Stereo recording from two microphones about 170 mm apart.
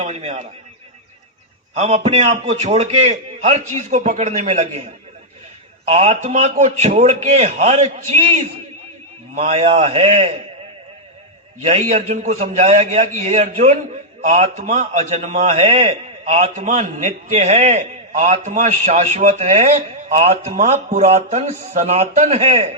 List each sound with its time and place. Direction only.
0.0 s a man's voice: 40° right (ahead or behind)
1.7 s a man's voice: 35° right (ahead or behind)
5.9 s a man's voice: 40° right (ahead or behind)
11.6 s a man's voice: 40° right (ahead or behind)